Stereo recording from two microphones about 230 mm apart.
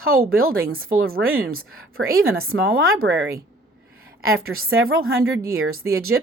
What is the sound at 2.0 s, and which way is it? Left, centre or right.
Speech, right.